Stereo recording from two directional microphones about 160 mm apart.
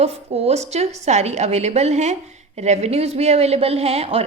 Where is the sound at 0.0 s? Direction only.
40° right (ahead or behind).